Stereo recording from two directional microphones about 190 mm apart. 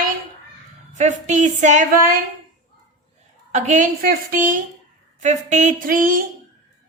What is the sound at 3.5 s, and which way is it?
A woman's voice, 40° right (ahead or behind).